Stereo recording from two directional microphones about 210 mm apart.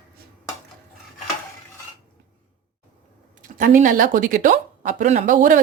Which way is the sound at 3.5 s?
40° right (ahead or behind).